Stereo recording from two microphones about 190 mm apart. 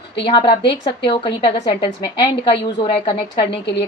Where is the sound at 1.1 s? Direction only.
25° left (ahead or behind).